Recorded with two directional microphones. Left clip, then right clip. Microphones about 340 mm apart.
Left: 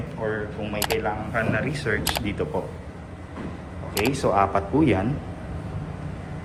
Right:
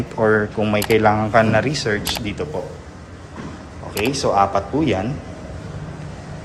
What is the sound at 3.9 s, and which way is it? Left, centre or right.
Speech, centre.